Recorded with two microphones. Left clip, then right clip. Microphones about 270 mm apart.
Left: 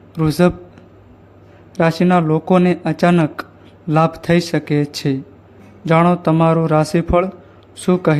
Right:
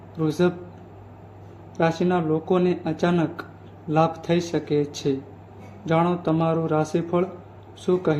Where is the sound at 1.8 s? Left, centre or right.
Left.